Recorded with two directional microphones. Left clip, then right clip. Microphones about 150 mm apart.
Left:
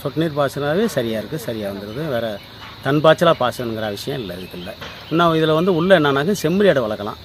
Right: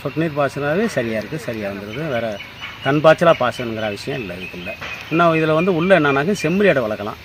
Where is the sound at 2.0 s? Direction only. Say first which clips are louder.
Even; centre (ahead or behind).